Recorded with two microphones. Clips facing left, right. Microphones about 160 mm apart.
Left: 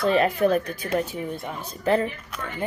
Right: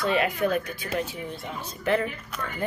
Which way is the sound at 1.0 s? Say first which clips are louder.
Left 4 dB; 45° left (ahead or behind).